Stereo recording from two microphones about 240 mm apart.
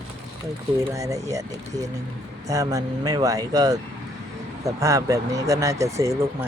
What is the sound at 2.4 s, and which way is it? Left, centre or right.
Speech, centre.